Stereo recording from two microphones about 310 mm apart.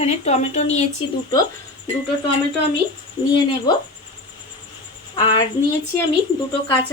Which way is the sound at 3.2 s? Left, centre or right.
Centre.